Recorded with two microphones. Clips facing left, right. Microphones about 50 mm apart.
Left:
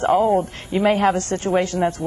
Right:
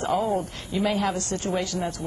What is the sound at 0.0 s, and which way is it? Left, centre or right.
Speech, left.